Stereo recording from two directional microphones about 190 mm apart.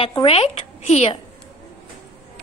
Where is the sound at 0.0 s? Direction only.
25° left (ahead or behind).